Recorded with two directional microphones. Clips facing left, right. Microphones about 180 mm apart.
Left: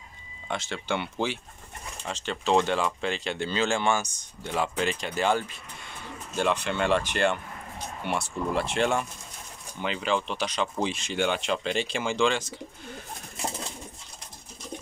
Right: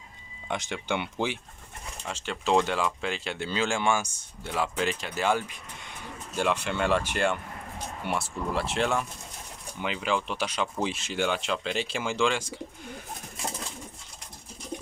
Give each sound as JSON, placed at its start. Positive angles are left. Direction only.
{"t": 0.5, "sound": "speech", "side_deg": -15}